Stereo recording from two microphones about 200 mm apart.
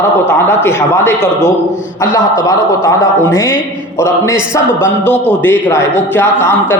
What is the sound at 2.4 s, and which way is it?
A man's voice, 15° left (ahead or behind).